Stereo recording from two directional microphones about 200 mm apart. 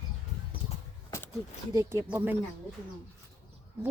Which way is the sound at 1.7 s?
15° right (ahead or behind).